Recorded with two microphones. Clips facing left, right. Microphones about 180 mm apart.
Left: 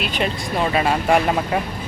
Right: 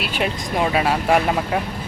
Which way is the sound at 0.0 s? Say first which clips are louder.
Even; 10° right (ahead or behind).